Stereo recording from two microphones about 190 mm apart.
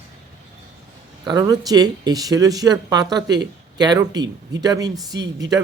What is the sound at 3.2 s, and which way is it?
Speech, 65° right (ahead or behind).